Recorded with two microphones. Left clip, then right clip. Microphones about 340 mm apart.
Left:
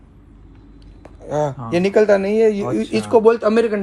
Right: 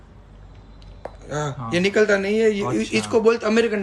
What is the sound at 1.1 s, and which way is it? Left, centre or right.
Speech, centre.